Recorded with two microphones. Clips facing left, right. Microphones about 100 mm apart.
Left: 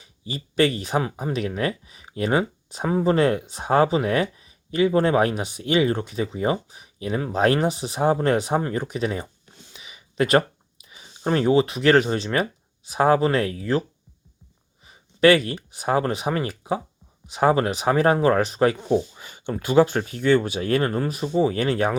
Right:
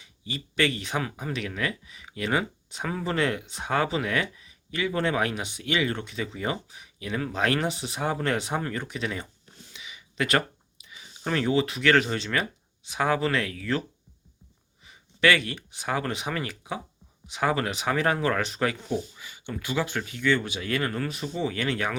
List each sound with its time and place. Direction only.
0.3 s a man's voice: 35° left (ahead or behind)
9.8 s a sound: 35° left (ahead or behind)
10.8 s speech: 30° left (ahead or behind)
14.8 s a sound: 35° left (ahead or behind)
15.4 s speech: 40° left (ahead or behind)
19.2 s speech: 45° left (ahead or behind)
20.9 s speech: 30° left (ahead or behind)